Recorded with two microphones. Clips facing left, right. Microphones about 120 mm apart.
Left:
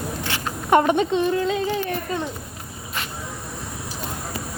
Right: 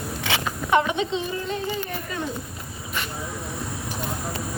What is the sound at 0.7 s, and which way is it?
Speech, 50° left (ahead or behind).